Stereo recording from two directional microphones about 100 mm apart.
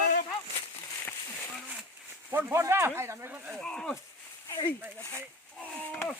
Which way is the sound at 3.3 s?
15° right (ahead or behind).